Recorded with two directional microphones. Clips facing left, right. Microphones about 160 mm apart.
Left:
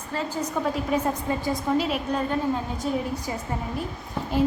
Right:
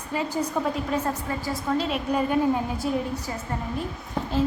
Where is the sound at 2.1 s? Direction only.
10° right (ahead or behind).